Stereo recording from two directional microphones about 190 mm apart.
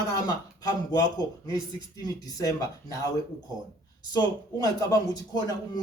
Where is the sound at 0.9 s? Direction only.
20° left (ahead or behind).